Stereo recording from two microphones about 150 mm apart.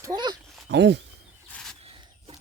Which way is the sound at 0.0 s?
25° right (ahead or behind).